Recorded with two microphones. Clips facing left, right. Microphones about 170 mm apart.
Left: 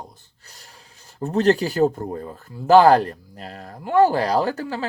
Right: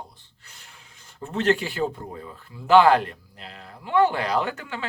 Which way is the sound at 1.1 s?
40° left (ahead or behind).